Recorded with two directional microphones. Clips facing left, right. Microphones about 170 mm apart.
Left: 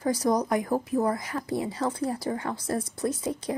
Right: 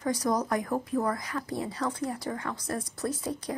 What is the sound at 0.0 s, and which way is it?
Speech, 30° left (ahead or behind).